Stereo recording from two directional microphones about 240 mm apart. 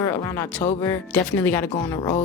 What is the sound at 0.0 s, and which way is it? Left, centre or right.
Speech, centre.